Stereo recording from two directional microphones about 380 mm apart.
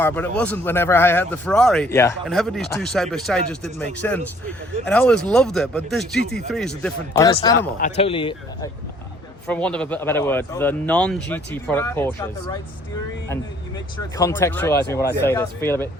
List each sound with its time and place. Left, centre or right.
0.0 s a man's voice: centre
7.1 s a man's voice: centre
13.9 s speech: centre